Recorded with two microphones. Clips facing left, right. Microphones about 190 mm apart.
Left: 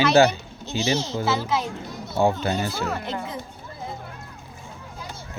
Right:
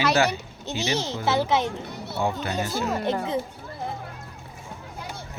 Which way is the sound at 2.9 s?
20° right (ahead or behind).